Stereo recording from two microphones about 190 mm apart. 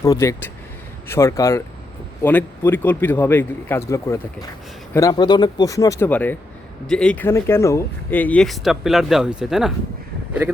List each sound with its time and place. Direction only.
0.0 s speech: 15° left (ahead or behind); by 9.7 s centre (ahead or behind)